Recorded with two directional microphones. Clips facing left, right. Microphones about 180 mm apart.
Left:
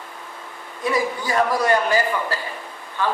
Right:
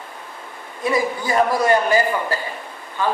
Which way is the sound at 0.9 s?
20° right (ahead or behind).